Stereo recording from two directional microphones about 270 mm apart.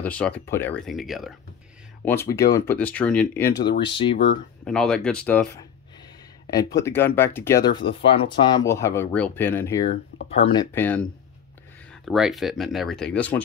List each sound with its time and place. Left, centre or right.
0.0 s speech: centre
2.0 s speech: centre
4.6 s speech: centre